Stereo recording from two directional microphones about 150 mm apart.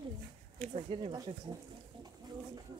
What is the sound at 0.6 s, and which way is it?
Speech, 40° right (ahead or behind).